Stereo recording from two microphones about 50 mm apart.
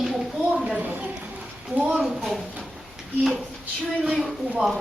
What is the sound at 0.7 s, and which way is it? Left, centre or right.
Speech, right.